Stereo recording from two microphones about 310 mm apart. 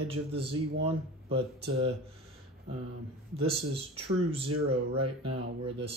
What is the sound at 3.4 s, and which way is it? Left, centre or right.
Speech, centre.